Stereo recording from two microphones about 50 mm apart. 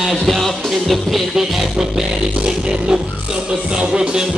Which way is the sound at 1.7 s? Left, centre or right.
Centre.